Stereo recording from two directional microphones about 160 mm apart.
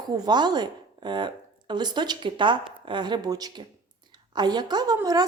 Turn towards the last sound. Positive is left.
turn(degrees=-25)  # may be behind; listen again after turning